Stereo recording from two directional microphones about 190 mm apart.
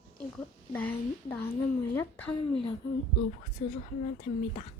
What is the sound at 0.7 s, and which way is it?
A woman's voice, 10° left (ahead or behind).